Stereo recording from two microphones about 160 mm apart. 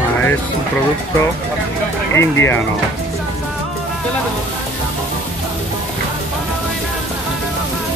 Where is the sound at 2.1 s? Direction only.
15° left (ahead or behind).